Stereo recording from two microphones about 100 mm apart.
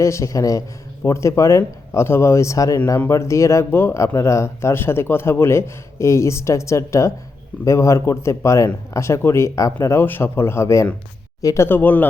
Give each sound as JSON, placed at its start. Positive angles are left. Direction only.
{"t": 0.0, "sound": "speech", "side_deg": 30}